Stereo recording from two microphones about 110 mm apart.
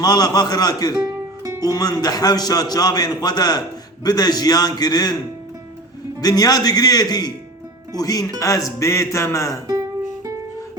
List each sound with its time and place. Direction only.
0.0 s a man's voice: 40° left (ahead or behind)
6.1 s a man's voice: 35° left (ahead or behind)